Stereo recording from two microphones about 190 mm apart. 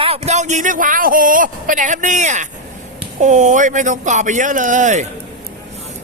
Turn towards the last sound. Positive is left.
turn(degrees=-40)  # may be behind; listen again after turning